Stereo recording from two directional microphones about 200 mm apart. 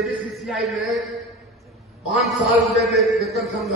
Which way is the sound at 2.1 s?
Centre (ahead or behind).